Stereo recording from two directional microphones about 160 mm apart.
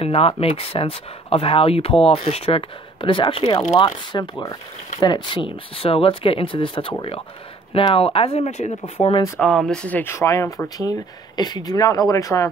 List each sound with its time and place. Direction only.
0.0 s speech: 35° left (ahead or behind)
9.4 s speech: 5° left (ahead or behind); by 12.4 s 20° left (ahead or behind)